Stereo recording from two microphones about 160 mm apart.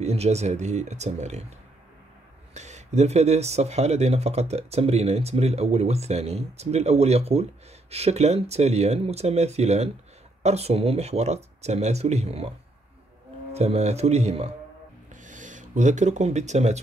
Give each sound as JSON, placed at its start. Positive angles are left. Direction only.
{"t": 0.0, "sound": "speech", "side_deg": -40}
{"t": 2.5, "sound": "speech", "side_deg": -45}
{"t": 13.5, "sound": "speech", "side_deg": -40}